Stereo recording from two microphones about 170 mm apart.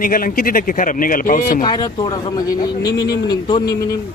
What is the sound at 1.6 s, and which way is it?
Speech, 25° left (ahead or behind).